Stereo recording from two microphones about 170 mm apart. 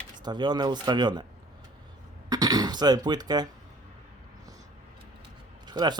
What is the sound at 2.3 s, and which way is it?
Speech, 20° right (ahead or behind).